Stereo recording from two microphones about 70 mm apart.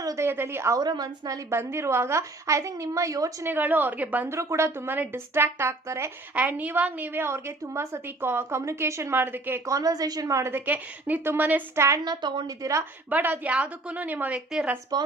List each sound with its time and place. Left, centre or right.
0.2 s a woman's voice: right
0.8 s a woman's voice: right
1.5 s a woman's voice: right
3.4 s a woman's voice: right
4.3 s a woman's voice: right
6.3 s a woman's voice: right
9.6 s a woman's voice: right
10.5 s a woman's voice: right
11.7 s a woman's voice: right
12.0 s a woman's voice: right
13.1 s a woman's voice: right